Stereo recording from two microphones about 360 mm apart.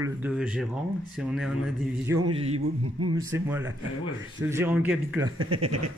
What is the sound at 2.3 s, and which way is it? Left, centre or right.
Speech, centre.